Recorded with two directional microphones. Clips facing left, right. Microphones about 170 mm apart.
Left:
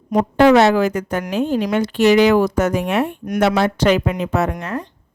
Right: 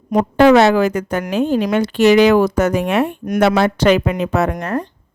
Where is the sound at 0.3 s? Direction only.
85° right.